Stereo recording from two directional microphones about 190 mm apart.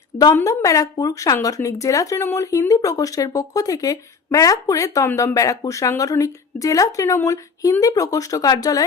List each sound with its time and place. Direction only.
0.2 s a woman's voice: 20° left (ahead or behind)